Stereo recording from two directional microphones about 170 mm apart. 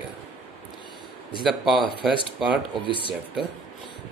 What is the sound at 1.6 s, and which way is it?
Speech, 30° right (ahead or behind).